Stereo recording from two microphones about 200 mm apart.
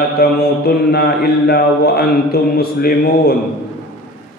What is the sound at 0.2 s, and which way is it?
Mantra, 50° left (ahead or behind).